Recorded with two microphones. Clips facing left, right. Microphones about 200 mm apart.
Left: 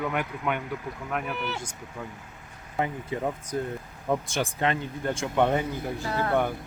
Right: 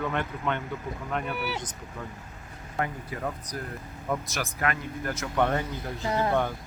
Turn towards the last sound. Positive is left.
turn(degrees=-20)  # may be behind; listen again after turning